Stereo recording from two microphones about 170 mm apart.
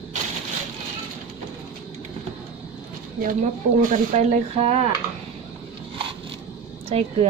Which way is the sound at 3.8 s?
50° right (ahead or behind).